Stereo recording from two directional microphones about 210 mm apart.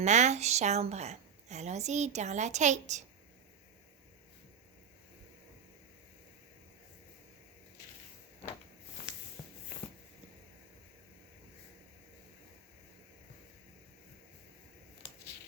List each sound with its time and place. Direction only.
0.0 s a woman's voice: 35° right (ahead or behind)